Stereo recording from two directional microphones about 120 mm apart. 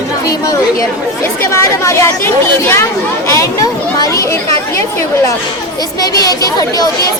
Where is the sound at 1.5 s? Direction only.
25° left (ahead or behind).